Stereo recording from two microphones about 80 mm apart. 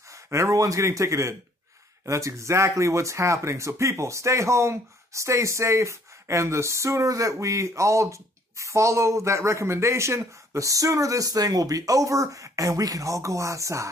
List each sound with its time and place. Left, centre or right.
0.1 s speech: right